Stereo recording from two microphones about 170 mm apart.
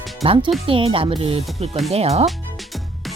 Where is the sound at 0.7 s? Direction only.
30° right (ahead or behind).